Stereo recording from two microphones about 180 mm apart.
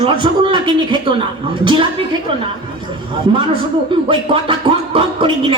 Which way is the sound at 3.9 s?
30° right (ahead or behind).